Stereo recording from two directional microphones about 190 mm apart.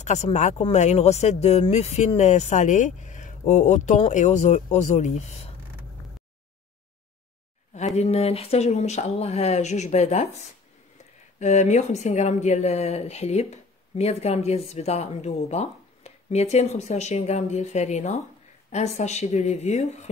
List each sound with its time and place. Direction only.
0.0 s speech: 35° left (ahead or behind)
7.7 s speech: 35° left (ahead or behind)
11.3 s speech: 40° left (ahead or behind)